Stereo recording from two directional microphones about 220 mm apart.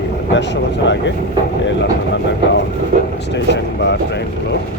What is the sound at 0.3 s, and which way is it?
Speech, 55° left (ahead or behind).